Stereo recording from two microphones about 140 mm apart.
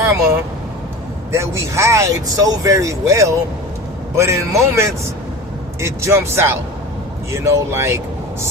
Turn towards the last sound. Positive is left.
turn(degrees=-20)  # may be behind; listen again after turning